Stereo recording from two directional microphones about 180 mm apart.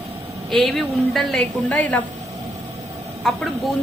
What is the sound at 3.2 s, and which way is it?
Speech, centre (ahead or behind).